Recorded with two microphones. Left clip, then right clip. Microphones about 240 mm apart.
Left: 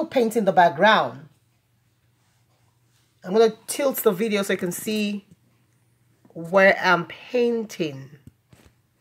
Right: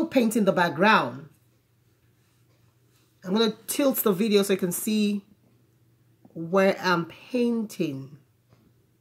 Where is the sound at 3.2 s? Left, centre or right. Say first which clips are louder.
Left 7 dB; centre.